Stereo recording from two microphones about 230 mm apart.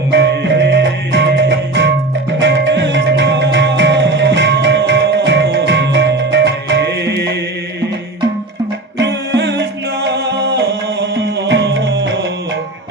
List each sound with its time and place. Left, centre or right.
0.1 s music: right
9.0 s music: right